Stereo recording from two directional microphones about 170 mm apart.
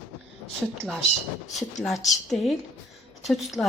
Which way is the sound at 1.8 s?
Centre (ahead or behind).